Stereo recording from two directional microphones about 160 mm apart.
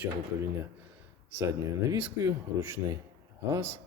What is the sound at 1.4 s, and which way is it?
Speech, 15° right (ahead or behind).